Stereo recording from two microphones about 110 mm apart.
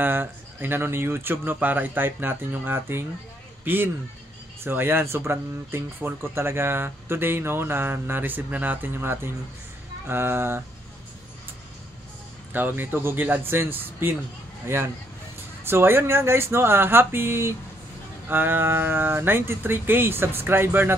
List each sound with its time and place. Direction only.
0.0 s speech: 20° right (ahead or behind)
12.5 s speech: 15° right (ahead or behind)
15.6 s speech: 20° right (ahead or behind)